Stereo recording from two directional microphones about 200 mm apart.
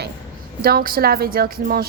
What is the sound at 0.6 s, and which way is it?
A woman's voice, 50° right (ahead or behind).